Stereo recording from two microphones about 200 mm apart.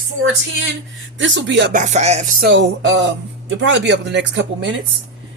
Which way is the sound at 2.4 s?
60° right (ahead or behind).